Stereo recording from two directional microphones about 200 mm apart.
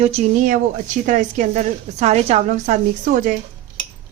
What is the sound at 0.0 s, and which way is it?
A woman's voice, 35° right (ahead or behind).